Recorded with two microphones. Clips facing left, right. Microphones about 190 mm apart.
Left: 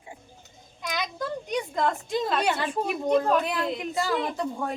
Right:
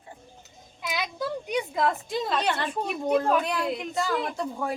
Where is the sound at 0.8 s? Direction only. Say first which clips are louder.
Even; 5° right (ahead or behind).